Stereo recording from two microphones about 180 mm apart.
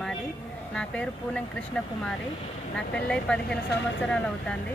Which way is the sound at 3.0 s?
5° left (ahead or behind).